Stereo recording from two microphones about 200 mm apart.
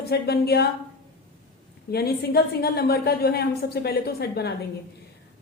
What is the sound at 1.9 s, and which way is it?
A woman's voice, 50° left (ahead or behind).